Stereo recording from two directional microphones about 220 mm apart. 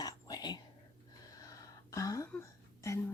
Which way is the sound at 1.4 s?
15° left (ahead or behind).